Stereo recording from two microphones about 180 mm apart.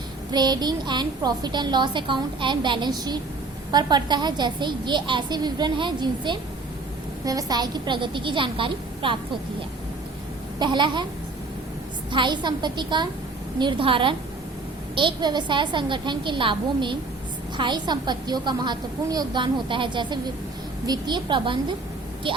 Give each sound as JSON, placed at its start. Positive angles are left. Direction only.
{"t": 0.3, "sound": "a woman's voice", "side_deg": -25}
{"t": 10.6, "sound": "a woman's voice", "side_deg": -25}
{"t": 12.1, "sound": "a woman's voice", "side_deg": -25}